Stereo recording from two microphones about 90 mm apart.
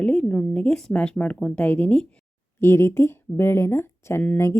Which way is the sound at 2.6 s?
30° left (ahead or behind).